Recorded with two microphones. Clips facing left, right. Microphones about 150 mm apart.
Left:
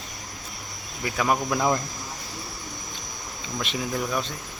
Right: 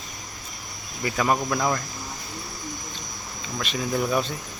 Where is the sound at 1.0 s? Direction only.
Centre (ahead or behind).